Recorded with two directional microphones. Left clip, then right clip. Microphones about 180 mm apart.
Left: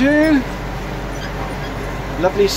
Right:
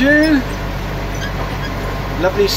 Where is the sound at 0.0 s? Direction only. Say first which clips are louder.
Right 2 dB; 15° left (ahead or behind).